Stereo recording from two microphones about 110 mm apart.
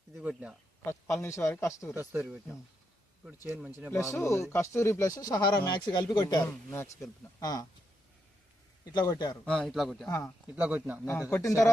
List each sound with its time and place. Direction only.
0.2 s speech: 10° right (ahead or behind)
0.9 s speech: 25° left (ahead or behind)
3.9 s speech: 25° left (ahead or behind)
8.8 s speech: 40° left (ahead or behind)
9.4 s speech: 5° left (ahead or behind)
10.1 s speech: 25° left (ahead or behind)
10.4 s speech: 15° right (ahead or behind)
11.0 s speech: 20° left (ahead or behind)